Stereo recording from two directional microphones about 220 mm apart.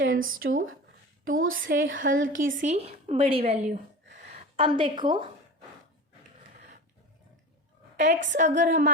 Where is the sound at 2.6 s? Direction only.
30° right (ahead or behind).